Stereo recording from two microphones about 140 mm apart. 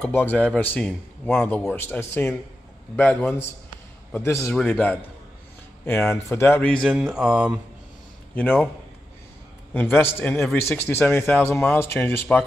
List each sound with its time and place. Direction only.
0.0 s a man's voice: 15° left (ahead or behind)
6.9 s mantra: 5° right (ahead or behind)
9.8 s a man's voice: 15° left (ahead or behind)